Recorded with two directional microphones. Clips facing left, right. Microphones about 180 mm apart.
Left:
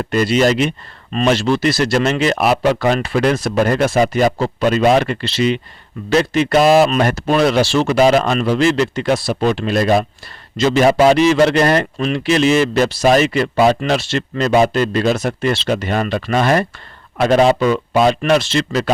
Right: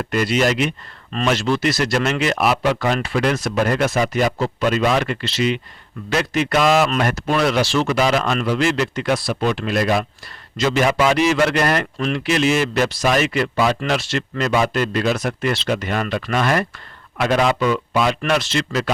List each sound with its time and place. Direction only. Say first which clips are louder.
0.0 s speech: left 4 dB; 30° left (ahead or behind)